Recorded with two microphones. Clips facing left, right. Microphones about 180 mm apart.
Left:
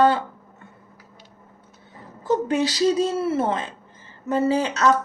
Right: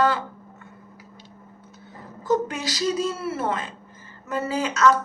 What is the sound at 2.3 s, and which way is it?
A woman's voice, 30° left (ahead or behind).